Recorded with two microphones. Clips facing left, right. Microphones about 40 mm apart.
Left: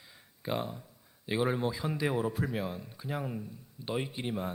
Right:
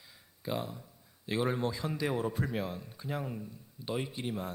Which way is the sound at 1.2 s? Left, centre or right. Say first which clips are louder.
Left 1 dB; centre.